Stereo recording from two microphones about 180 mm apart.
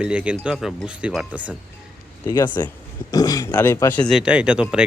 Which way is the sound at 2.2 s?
25° left (ahead or behind).